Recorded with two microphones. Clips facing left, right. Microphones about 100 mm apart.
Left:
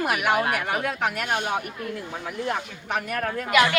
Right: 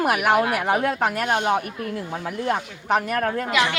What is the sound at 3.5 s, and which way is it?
Speech, 20° right (ahead or behind).